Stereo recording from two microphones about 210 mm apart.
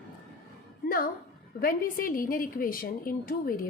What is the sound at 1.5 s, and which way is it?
A woman's voice, 45° left (ahead or behind).